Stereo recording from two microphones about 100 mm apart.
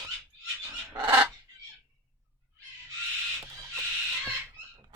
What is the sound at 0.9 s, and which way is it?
Fowl, 35° right (ahead or behind).